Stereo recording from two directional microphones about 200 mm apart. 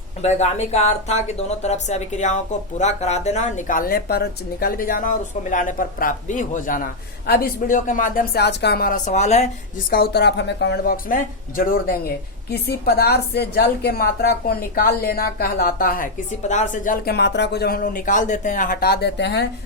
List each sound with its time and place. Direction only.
0.2 s a woman's voice: 35° left (ahead or behind)
9.9 s a woman's voice: 55° left (ahead or behind)